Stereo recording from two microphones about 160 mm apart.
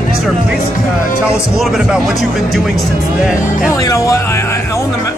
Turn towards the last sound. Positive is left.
turn(degrees=15)  # may be behind; listen again after turning